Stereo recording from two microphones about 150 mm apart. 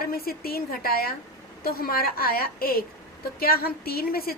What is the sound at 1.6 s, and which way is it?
A woman's voice, 80° left.